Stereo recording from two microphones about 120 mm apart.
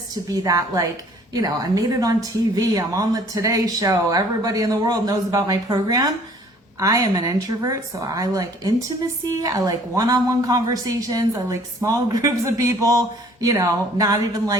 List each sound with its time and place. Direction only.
0.1 s a woman's voice: 30° right (ahead or behind)